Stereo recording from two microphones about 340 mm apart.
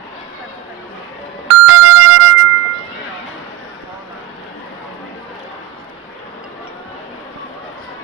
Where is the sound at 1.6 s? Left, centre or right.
Right.